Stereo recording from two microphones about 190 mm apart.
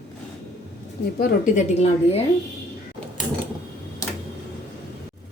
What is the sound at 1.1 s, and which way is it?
A woman's voice, 50° left (ahead or behind).